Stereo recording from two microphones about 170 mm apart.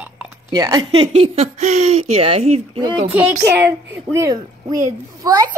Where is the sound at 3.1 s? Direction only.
10° right (ahead or behind).